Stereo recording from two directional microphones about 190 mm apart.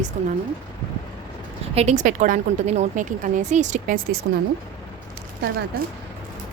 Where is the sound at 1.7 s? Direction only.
35° right (ahead or behind).